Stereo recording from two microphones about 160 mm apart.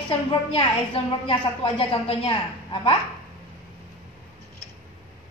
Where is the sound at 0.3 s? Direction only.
30° left (ahead or behind).